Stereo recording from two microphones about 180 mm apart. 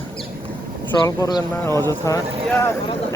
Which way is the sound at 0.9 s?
20° left (ahead or behind).